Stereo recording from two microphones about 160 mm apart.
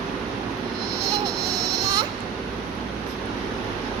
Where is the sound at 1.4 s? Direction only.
Centre (ahead or behind).